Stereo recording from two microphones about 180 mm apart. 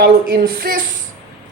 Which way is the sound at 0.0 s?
55° right (ahead or behind).